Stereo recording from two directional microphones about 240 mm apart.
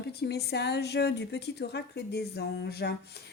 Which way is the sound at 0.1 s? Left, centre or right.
Left.